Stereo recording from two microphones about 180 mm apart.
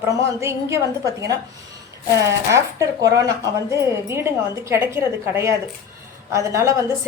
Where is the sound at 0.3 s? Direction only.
15° right (ahead or behind).